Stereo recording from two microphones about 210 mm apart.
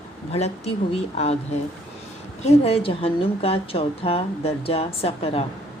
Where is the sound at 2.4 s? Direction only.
30° left (ahead or behind).